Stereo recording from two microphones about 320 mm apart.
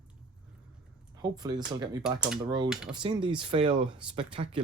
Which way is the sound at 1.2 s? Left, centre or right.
Centre.